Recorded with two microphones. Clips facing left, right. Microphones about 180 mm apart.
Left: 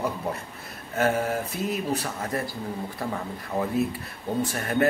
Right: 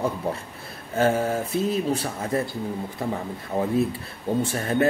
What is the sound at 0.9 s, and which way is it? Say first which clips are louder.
Speech: right 3 dB; 30° right (ahead or behind).